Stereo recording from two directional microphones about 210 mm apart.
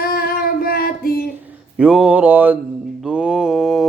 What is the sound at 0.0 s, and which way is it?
Child singing, 45° left (ahead or behind).